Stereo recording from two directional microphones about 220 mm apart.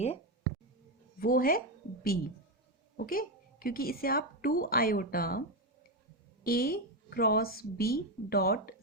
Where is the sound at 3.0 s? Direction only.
40° left (ahead or behind).